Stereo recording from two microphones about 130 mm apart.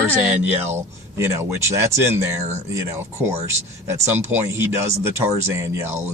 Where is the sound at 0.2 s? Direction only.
15° right (ahead or behind).